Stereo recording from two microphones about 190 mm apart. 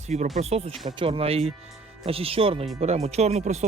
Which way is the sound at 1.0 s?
30° right (ahead or behind).